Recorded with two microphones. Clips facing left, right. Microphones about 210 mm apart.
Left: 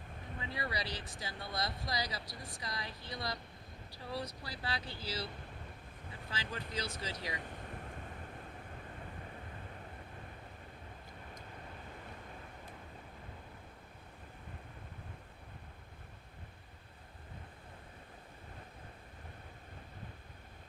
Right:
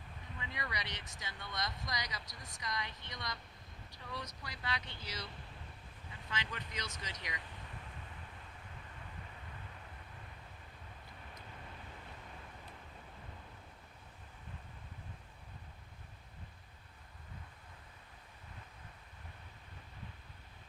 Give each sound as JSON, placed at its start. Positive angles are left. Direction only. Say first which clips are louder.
{"t": 0.3, "sound": "speech", "louder": "left 4 dB", "side_deg": 35}
{"t": 6.3, "sound": "speech", "louder": "left 3 dB", "side_deg": 30}
{"t": 7.4, "sound": "a sound", "louder": "left 6 dB", "side_deg": 50}